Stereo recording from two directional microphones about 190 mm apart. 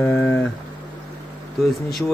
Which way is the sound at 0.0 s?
5° left (ahead or behind).